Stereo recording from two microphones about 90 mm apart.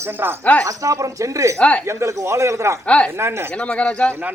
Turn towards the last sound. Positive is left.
turn(degrees=15)  # may be behind; listen again after turning